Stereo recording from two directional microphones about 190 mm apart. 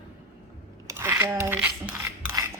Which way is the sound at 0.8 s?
15° right (ahead or behind).